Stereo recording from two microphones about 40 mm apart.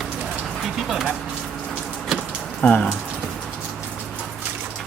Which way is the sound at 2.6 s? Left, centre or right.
Left.